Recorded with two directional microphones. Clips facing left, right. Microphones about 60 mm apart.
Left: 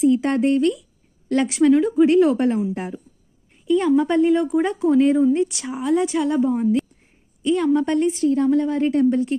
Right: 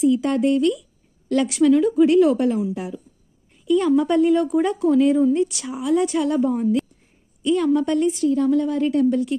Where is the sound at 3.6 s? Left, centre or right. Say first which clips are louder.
Even; left.